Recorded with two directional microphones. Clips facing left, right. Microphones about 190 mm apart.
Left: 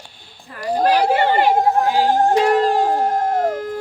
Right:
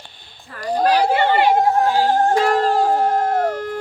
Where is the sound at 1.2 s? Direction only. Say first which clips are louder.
Even; 40° left (ahead or behind).